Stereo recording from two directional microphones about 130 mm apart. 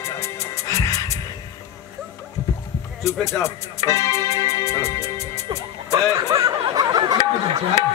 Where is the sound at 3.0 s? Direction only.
20° left (ahead or behind).